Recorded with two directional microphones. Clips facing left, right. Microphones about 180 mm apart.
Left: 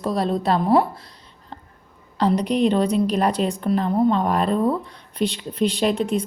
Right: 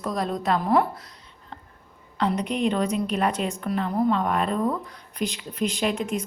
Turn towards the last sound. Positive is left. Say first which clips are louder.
# left 5 dB
turn(degrees=35)  # may be behind; listen again after turning